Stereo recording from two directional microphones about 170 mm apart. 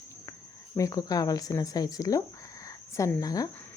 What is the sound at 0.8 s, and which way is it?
Speech, 20° left (ahead or behind).